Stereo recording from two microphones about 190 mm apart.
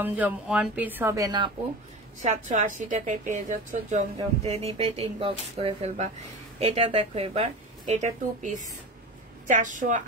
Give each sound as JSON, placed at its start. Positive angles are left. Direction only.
{"t": 0.0, "sound": "speech", "side_deg": -10}
{"t": 2.2, "sound": "a woman's voice", "side_deg": -40}